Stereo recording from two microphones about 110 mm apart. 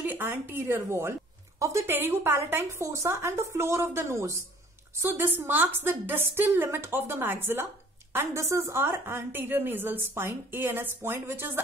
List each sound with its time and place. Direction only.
0.0 s a woman's voice: 15° right (ahead or behind)